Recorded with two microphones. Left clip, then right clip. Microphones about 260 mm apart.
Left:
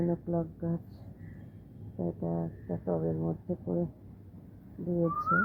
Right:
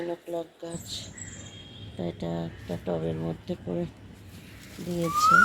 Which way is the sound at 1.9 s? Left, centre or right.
Centre.